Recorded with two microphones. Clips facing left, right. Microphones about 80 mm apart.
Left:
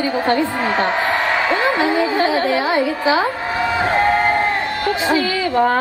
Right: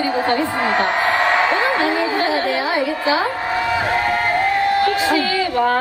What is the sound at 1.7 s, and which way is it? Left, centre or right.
Music, left.